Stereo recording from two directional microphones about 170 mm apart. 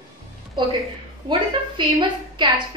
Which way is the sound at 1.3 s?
25° right (ahead or behind).